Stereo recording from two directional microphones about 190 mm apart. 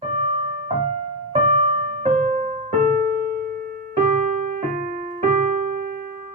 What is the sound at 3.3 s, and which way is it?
Music, 50° right (ahead or behind).